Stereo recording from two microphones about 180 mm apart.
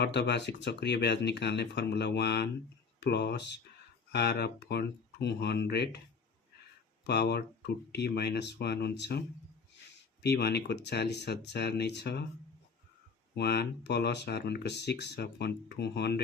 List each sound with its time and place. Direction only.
0.0 s speech: 70° left (ahead or behind)
7.1 s speech: 70° left (ahead or behind)
10.2 s speech: 65° left (ahead or behind)
13.3 s speech: 65° left (ahead or behind)